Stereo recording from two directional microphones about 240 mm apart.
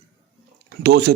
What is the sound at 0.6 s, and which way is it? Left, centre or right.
Speech, right.